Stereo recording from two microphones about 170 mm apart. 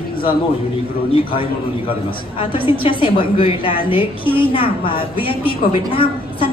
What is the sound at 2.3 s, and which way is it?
A woman's voice, 30° left (ahead or behind).